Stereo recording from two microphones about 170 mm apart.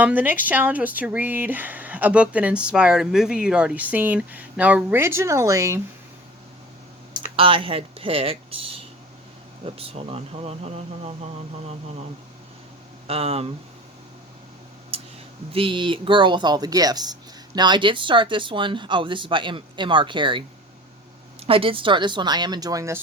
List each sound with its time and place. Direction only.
0.0 s speech: 10° right (ahead or behind)
7.1 s speech: 30° right (ahead or behind)
13.1 s speech: 35° right (ahead or behind)
14.9 s a sound: 35° right (ahead or behind)
15.5 s speech: 30° right (ahead or behind)
21.4 s speech: 35° right (ahead or behind)